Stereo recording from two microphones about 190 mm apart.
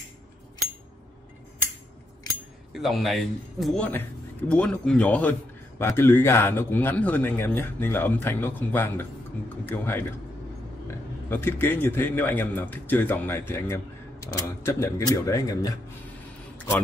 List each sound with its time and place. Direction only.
2.7 s speech: centre (ahead or behind); by 15.7 s 20° left (ahead or behind)